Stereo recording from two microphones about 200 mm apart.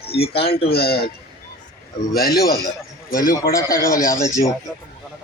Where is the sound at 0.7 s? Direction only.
50° left (ahead or behind).